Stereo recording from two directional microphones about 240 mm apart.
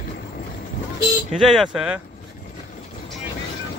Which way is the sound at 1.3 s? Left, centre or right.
Centre.